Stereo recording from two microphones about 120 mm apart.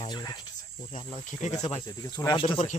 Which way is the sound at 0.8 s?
55° left (ahead or behind).